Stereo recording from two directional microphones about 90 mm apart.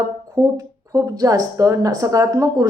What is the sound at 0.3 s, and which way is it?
Speech, 40° right (ahead or behind).